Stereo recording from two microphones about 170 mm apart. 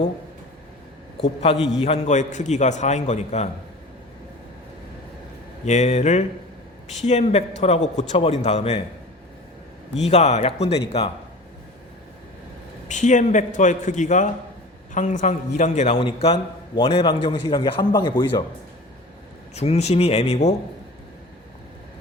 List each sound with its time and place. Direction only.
1.2 s a man's voice: 35° left (ahead or behind)
5.6 s a man's voice: 40° left (ahead or behind)
10.0 s a man's voice: 40° left (ahead or behind)
12.9 s a man's voice: 45° left (ahead or behind); by 18.4 s 25° left (ahead or behind)
19.5 s a man's voice: 40° left (ahead or behind)